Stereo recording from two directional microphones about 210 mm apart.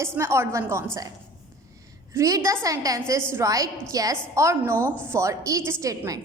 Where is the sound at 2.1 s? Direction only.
15° right (ahead or behind).